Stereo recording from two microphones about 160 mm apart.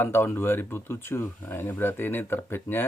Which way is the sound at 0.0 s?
15° left (ahead or behind).